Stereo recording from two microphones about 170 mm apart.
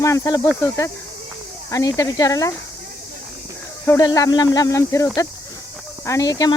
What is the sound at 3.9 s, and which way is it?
Speech, 20° left (ahead or behind).